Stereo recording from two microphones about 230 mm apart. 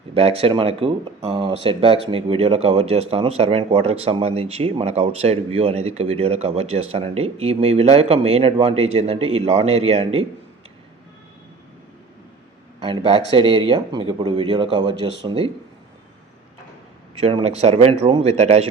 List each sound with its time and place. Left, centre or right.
0.1 s speech: right
12.8 s a man's voice: right
17.2 s speech: right